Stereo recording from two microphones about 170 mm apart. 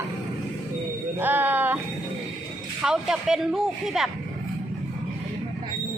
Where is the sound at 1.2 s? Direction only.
10° right (ahead or behind).